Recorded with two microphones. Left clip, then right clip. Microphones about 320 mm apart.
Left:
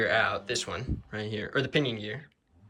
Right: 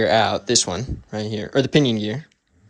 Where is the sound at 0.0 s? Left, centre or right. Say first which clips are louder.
Right 8 dB; centre.